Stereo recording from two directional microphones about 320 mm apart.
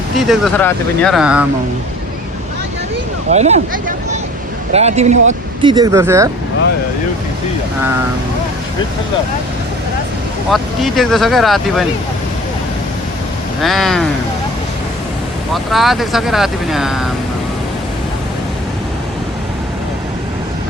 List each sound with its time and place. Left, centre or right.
0.3 s speech: centre
3.2 s speech: right
10.5 s speech: centre
13.6 s speech: centre
15.5 s speech: centre